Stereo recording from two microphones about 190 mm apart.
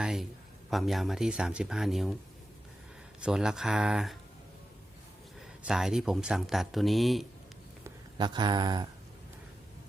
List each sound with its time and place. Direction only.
0.0 s a sound: centre (ahead or behind)
0.7 s speech: centre (ahead or behind)
3.2 s speech: 5° right (ahead or behind)
5.6 s speech: 5° right (ahead or behind)
7.9 s speech: 25° right (ahead or behind)